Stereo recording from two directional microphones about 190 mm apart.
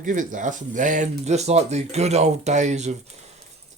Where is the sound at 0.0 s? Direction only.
45° right (ahead or behind).